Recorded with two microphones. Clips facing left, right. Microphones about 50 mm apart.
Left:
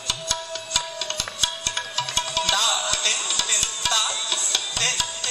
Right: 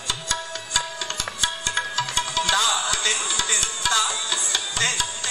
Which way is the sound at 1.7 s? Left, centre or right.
Centre.